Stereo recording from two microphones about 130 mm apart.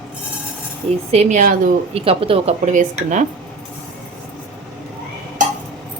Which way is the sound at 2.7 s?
65° right (ahead or behind).